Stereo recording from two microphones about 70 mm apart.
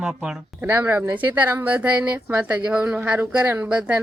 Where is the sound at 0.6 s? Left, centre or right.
Right.